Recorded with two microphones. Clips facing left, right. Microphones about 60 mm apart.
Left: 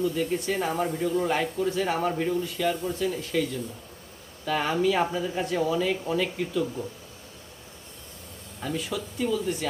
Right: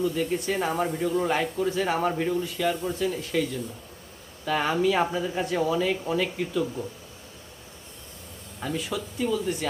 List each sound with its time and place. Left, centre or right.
0.0 s speech: centre
4.4 s speech: centre
8.6 s speech: centre